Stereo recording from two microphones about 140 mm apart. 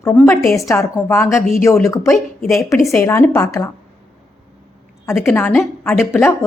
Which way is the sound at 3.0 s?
20° left (ahead or behind).